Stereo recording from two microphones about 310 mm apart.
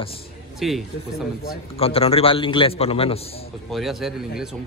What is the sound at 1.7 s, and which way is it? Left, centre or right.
A man's voice, centre.